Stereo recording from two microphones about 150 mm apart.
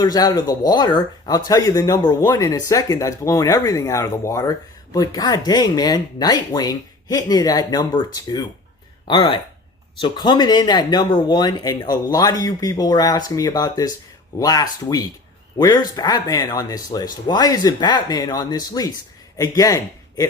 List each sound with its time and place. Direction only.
0.0 s speech: 25° left (ahead or behind)